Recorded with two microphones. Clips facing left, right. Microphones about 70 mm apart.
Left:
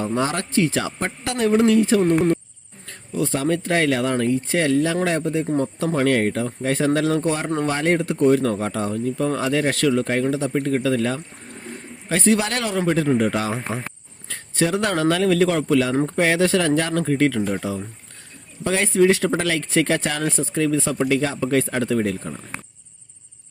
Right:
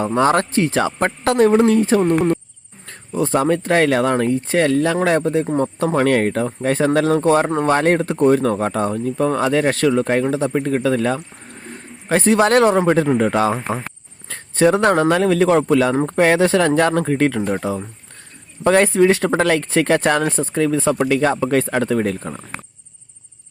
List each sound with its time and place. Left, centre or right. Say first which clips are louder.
0.0 s speech: right 7 dB; right
13.8 s cricket: right 2 dB; right
15.1 s speech: right 4 dB; right
15.6 s speech: right 3 dB; right